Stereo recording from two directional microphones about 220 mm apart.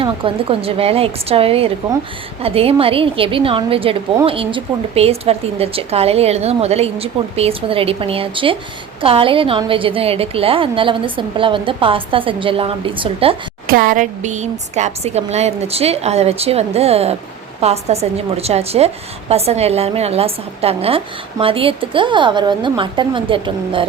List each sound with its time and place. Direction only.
0.0 s a woman's voice: 25° right (ahead or behind)
13.7 s a woman's voice: 40° right (ahead or behind); by 23.8 s 25° right (ahead or behind)